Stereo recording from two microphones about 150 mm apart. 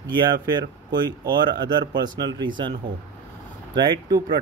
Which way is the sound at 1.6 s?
30° right (ahead or behind).